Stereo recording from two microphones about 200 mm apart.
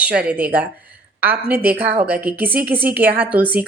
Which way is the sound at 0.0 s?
5° right (ahead or behind).